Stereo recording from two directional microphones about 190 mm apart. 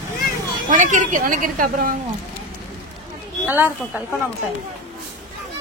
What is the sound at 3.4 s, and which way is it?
Speech, 10° right (ahead or behind).